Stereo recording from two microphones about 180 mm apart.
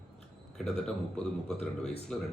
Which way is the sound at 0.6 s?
5° left (ahead or behind).